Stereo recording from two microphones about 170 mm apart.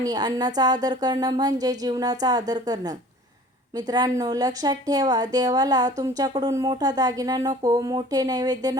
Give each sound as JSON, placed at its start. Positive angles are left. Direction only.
{"t": 0.0, "sound": "speech", "side_deg": -25}